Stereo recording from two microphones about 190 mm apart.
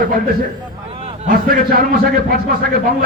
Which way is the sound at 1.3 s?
50° right (ahead or behind).